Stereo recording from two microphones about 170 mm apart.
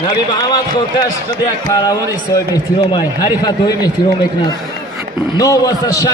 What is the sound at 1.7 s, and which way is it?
A man's voice, 20° left (ahead or behind).